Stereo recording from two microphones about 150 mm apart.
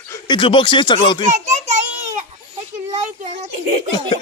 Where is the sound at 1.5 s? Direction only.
50° right (ahead or behind).